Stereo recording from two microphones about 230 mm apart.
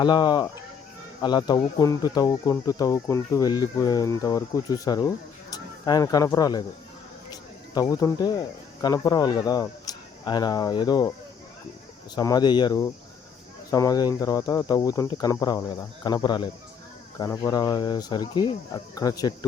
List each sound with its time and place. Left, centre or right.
0.0 s speech: centre
7.7 s speech: centre
12.1 s speech: centre